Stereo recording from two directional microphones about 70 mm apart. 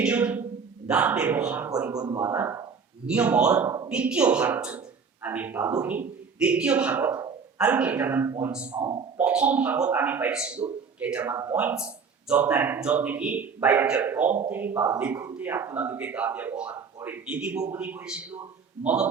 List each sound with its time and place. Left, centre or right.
0.0 s speech: centre
1.9 s speech: right
2.2 s speech: right
3.1 s speech: centre
14.7 s speech: right
14.9 s a man's voice: right